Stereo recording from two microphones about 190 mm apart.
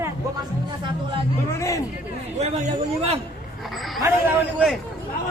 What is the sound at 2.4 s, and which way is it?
Speech, 35° right (ahead or behind).